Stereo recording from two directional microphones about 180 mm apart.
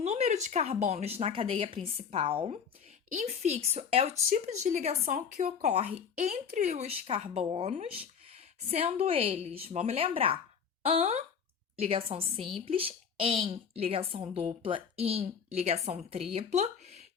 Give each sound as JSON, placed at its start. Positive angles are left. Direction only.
{"t": 0.0, "sound": "a woman's voice", "side_deg": -40}